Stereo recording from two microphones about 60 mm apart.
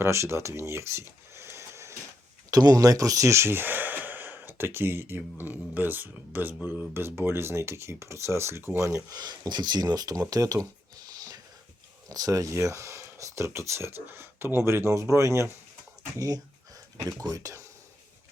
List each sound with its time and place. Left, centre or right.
0.0 s speech: right
2.5 s speech: right
10.2 s speech: right
12.0 s speech: right
16.1 s speech: right
17.0 s speech: right